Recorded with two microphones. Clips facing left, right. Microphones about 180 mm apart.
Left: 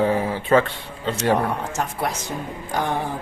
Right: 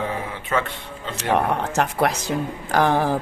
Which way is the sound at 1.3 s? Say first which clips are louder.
Right 3 dB; 70° right (ahead or behind).